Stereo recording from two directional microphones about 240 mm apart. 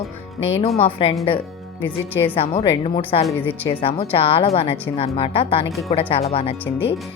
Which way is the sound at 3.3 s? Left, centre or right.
Centre.